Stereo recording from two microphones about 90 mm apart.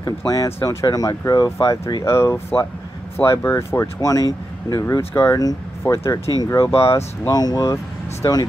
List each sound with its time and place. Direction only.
0.0 s speech: 40° left (ahead or behind)
7.2 s speech: 45° left (ahead or behind)